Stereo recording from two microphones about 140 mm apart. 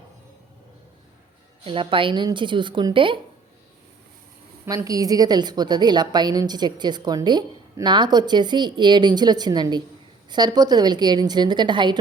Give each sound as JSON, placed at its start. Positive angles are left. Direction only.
{"t": 1.6, "sound": "a woman's voice", "side_deg": -40}
{"t": 4.6, "sound": "a woman's voice", "side_deg": -25}